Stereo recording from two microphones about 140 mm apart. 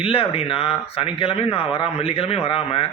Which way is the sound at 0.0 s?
40° left (ahead or behind).